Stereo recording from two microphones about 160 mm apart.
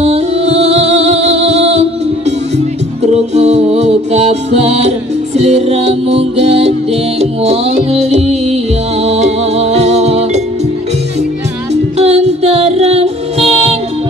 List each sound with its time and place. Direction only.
0.0 s music: 40° right (ahead or behind)
11.7 s music: 40° right (ahead or behind)